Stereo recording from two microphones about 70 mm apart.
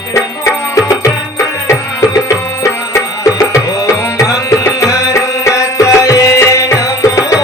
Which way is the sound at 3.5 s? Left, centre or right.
Left.